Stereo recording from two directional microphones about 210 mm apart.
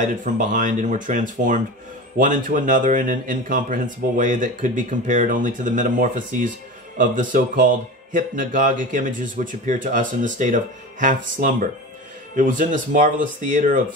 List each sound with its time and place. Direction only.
0.0 s speech: 40° right (ahead or behind)